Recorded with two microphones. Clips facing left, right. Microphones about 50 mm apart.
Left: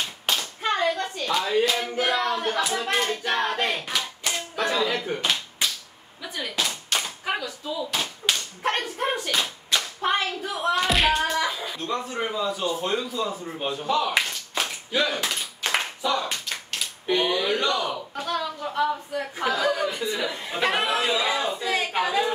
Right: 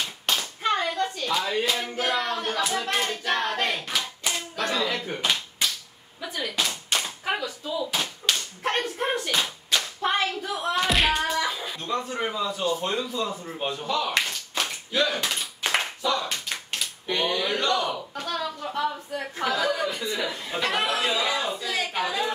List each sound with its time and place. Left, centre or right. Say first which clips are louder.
0.6 s hands: left 2 dB; centre
1.3 s speech: left 5 dB; centre
6.9 s hands: even; centre
8.3 s whip: left 2 dB; centre
9.8 s speech: even; centre
13.8 s a sound: left 3 dB; centre
15.6 s clapping: even; centre
16.0 s speech: left 1 dB; centre
20.3 s speech: left 2 dB; centre
21.5 s a sound: left 3 dB; left
21.9 s speech: left 4 dB; centre